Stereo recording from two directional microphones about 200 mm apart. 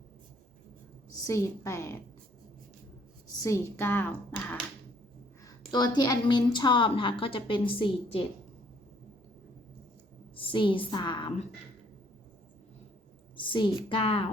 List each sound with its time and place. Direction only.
1.1 s a woman's voice: 15° left (ahead or behind)
3.4 s speech: 15° left (ahead or behind)
5.5 s a woman's voice: 20° left (ahead or behind)
10.3 s a woman's voice: 25° left (ahead or behind)
13.3 s a woman's voice: 25° left (ahead or behind)